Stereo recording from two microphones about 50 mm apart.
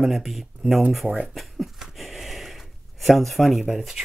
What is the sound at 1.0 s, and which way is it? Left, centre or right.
Speech, right.